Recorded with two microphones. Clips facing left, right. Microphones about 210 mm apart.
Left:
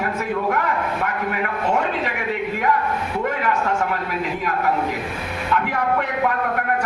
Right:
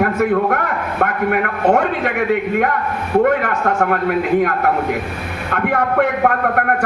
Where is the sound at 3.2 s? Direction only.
60° right (ahead or behind).